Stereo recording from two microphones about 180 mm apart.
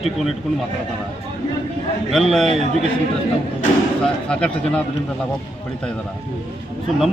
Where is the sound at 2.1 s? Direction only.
Centre (ahead or behind).